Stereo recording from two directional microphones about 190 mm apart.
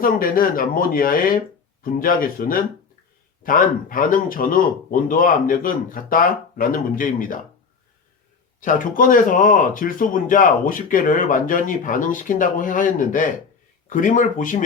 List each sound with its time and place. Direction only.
0.0 s speech: 50° left (ahead or behind)
8.6 s speech: 45° left (ahead or behind)